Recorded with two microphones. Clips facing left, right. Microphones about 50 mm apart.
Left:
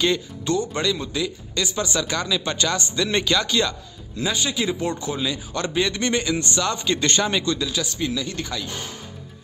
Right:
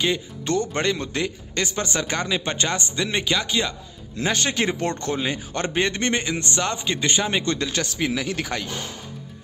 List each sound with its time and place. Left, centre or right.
0.5 s a man's voice: right
3.1 s speech: centre
4.2 s speech: right
5.2 s a man's voice: right; by 7.4 s centre
7.4 s speech: right